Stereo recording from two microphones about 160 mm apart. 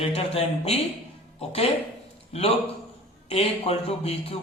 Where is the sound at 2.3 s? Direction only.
40° left (ahead or behind).